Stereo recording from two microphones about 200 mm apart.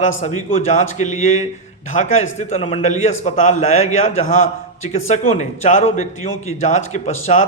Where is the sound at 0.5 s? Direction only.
35° left (ahead or behind).